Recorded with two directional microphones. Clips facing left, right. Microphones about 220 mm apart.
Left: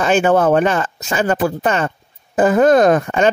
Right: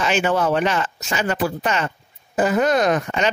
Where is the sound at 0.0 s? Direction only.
50° left (ahead or behind).